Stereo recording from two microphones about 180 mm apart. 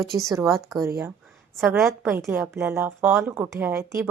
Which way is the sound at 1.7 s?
Centre (ahead or behind).